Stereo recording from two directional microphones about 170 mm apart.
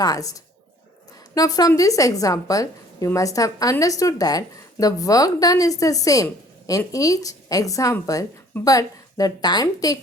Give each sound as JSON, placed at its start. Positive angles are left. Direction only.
{"t": 0.0, "sound": "a woman's voice", "side_deg": 20}
{"t": 1.4, "sound": "a woman's voice", "side_deg": 20}